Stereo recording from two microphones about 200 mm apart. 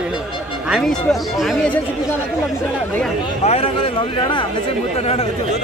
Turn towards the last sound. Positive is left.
turn(degrees=30)  # may be behind; listen again after turning